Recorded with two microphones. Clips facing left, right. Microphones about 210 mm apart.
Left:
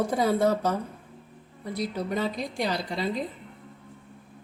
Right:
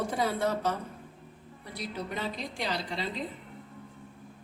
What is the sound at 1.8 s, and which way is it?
A woman's voice, 40° left (ahead or behind).